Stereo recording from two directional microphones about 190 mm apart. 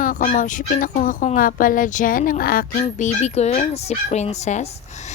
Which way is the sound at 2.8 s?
35° left (ahead or behind).